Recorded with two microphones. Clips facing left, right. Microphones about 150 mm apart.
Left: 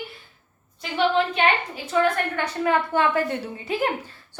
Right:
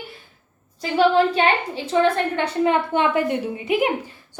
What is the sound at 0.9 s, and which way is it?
A woman's voice, 35° right (ahead or behind).